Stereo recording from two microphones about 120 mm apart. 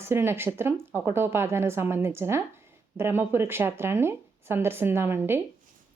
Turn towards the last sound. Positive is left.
turn(degrees=-20)  # may be behind; listen again after turning